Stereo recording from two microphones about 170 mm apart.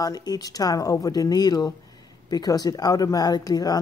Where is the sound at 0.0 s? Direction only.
25° left (ahead or behind).